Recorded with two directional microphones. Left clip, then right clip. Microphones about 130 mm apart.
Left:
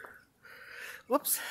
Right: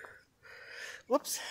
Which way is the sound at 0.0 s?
25° right (ahead or behind).